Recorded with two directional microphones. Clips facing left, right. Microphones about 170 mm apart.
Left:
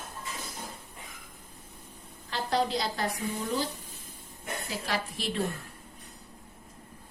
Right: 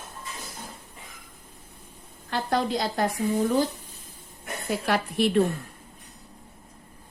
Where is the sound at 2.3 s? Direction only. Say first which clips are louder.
Right 3 dB; 50° right (ahead or behind).